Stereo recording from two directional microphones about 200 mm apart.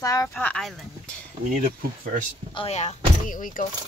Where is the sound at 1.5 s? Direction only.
40° right (ahead or behind).